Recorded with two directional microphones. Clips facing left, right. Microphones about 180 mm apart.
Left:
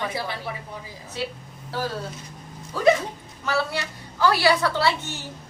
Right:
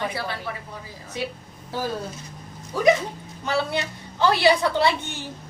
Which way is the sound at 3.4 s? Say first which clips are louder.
Right 1 dB; 20° right (ahead or behind).